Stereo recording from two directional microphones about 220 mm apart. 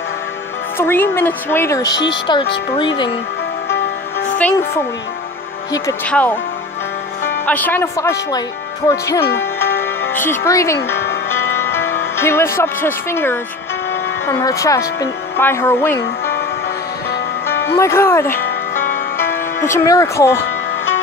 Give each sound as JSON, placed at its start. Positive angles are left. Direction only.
{"t": 0.7, "sound": "speech", "side_deg": 10}
{"t": 4.4, "sound": "speech", "side_deg": 10}
{"t": 7.4, "sound": "speech", "side_deg": 10}
{"t": 11.2, "sound": "music", "side_deg": 10}
{"t": 12.2, "sound": "speech", "side_deg": 10}
{"t": 17.7, "sound": "speech", "side_deg": 10}
{"t": 18.4, "sound": "music", "side_deg": 40}
{"t": 19.1, "sound": "speech", "side_deg": 10}